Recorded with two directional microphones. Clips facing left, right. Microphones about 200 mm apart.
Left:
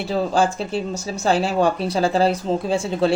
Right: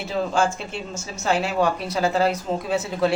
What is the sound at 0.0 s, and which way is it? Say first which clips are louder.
Speech: left 3 dB; 35° left (ahead or behind).